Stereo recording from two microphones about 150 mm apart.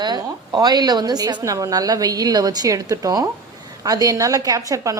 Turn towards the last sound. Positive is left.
turn(degrees=-20)  # may be behind; listen again after turning